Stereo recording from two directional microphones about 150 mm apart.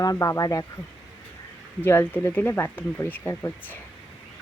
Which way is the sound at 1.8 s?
15° left (ahead or behind).